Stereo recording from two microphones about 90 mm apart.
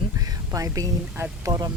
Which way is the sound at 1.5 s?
40° right (ahead or behind).